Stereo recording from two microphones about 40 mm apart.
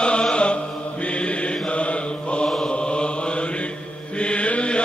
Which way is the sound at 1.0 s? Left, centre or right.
Left.